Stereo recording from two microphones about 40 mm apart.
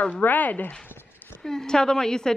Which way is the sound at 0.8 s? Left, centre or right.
Left.